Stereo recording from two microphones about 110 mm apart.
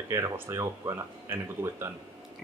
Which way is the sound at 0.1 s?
30° right (ahead or behind).